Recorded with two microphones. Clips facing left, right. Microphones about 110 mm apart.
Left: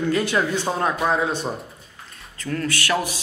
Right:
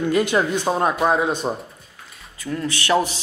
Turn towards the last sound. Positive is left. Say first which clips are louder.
# right 3 dB
turn(degrees=-20)  # may be behind; listen again after turning